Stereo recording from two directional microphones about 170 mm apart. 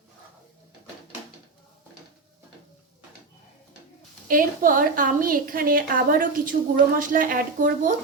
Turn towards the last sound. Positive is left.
turn(degrees=-50)  # may be behind; listen again after turning